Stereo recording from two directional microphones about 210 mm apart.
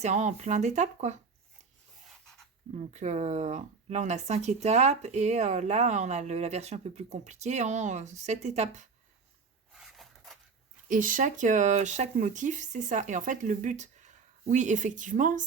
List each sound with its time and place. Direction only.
0.0 s speech: 35° right (ahead or behind)
2.7 s speech: 35° right (ahead or behind)
9.7 s a sound: centre (ahead or behind)
10.8 s speech: 40° right (ahead or behind)